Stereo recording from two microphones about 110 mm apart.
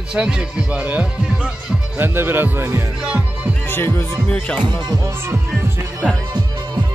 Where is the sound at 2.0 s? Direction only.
20° right (ahead or behind).